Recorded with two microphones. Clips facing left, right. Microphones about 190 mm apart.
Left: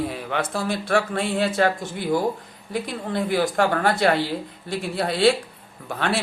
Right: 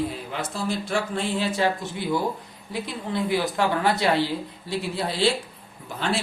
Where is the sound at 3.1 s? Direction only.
50° left (ahead or behind).